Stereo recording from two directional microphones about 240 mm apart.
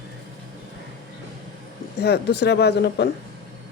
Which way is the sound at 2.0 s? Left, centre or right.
Left.